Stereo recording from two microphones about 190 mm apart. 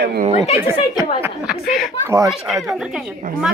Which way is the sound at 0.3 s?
35° left (ahead or behind).